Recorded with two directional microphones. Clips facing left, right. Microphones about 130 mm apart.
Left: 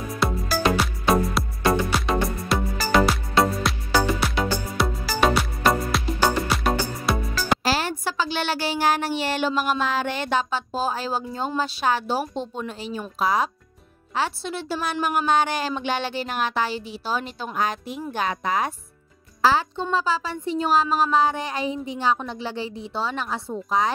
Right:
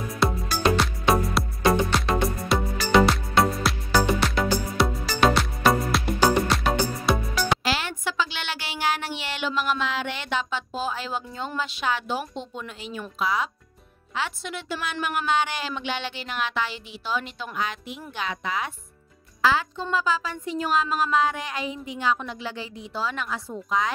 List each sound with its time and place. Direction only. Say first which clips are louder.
0.2 s music: even; centre (ahead or behind)
7.6 s a woman's voice: left 3 dB; 40° left (ahead or behind)